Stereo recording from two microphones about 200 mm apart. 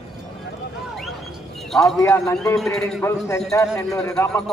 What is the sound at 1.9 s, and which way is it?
Speech, 15° left (ahead or behind).